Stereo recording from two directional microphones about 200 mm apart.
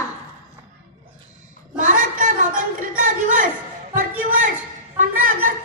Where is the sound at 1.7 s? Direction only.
40° right (ahead or behind).